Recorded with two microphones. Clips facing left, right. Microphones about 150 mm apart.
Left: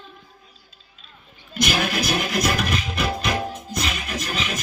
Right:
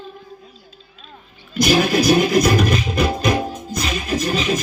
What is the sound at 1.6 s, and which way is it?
Music, 40° right (ahead or behind).